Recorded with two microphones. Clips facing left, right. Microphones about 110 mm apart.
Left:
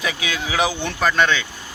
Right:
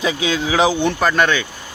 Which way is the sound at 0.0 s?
25° right (ahead or behind).